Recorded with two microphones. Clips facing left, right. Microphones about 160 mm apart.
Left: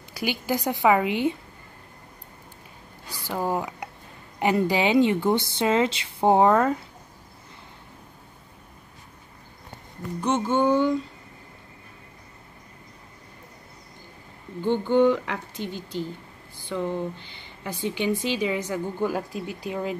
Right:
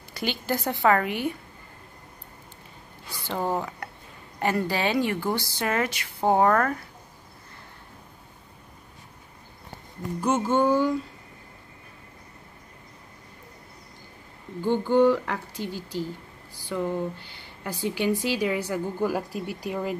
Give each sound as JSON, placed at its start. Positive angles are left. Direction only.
{"t": 0.1, "sound": "a woman's voice", "side_deg": 10}
{"t": 3.1, "sound": "a sound", "side_deg": 10}
{"t": 4.4, "sound": "speech", "side_deg": 15}
{"t": 10.2, "sound": "speech", "side_deg": -5}
{"t": 14.6, "sound": "speech", "side_deg": -10}